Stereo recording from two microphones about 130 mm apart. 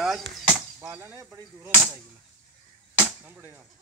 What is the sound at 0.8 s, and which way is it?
Speech, 20° right (ahead or behind).